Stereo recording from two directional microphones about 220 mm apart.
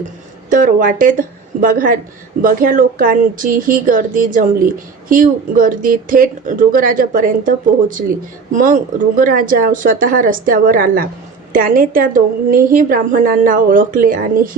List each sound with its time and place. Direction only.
0.5 s speech: 35° right (ahead or behind)